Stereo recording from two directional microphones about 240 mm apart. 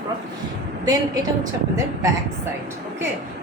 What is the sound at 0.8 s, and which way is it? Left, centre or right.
Speech, centre.